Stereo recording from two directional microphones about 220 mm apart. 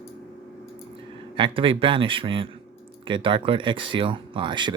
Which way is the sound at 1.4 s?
25° right (ahead or behind).